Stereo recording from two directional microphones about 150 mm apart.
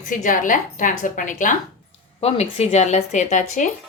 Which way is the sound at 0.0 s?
60° left (ahead or behind).